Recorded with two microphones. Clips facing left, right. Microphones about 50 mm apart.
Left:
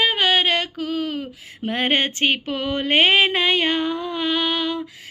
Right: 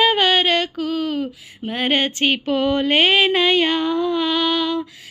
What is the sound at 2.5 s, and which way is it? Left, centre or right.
Speech, centre.